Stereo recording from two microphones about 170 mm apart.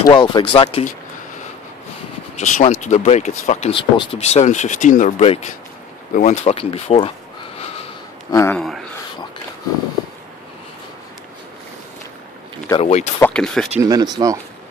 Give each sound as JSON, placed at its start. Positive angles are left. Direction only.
{"t": 0.0, "sound": "speech", "side_deg": 30}
{"t": 2.3, "sound": "speech", "side_deg": 45}
{"t": 8.3, "sound": "speech", "side_deg": 15}
{"t": 12.8, "sound": "speech", "side_deg": 40}
{"t": 13.2, "sound": "speech", "side_deg": 5}
{"t": 13.7, "sound": "speech", "side_deg": -20}